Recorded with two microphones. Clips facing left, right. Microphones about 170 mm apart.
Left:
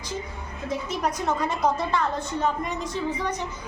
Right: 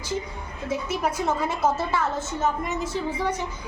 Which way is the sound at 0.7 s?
10° right (ahead or behind).